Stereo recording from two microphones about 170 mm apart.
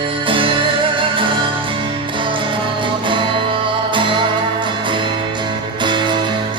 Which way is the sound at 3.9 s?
30° right (ahead or behind).